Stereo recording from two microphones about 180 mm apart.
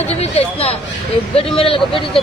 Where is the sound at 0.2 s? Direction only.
35° left (ahead or behind).